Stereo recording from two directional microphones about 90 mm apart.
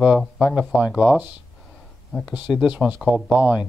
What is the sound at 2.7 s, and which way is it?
Speech, 15° right (ahead or behind).